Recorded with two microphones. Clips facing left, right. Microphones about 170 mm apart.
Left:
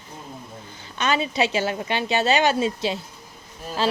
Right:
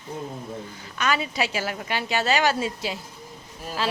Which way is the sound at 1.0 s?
25° left (ahead or behind).